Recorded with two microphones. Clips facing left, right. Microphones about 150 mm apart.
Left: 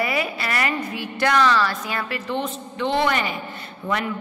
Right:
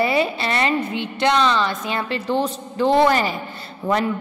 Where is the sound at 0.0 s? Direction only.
30° right (ahead or behind).